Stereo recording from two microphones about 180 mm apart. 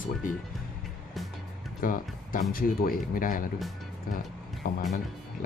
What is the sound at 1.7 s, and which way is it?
Speech, 50° left (ahead or behind).